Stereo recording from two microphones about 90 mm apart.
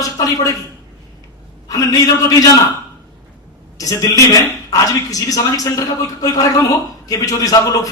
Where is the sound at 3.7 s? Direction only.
40° left (ahead or behind).